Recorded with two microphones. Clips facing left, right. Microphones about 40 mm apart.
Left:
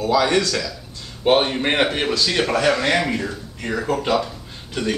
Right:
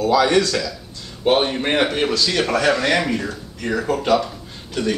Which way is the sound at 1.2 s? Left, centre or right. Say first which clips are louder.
Even; centre.